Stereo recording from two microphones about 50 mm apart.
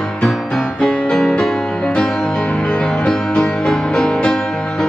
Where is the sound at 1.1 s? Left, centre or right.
Centre.